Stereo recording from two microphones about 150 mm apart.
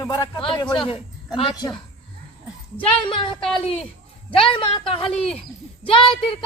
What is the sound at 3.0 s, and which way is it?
Speech, 35° left (ahead or behind).